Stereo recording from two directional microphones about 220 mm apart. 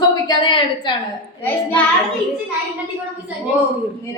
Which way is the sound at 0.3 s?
20° left (ahead or behind).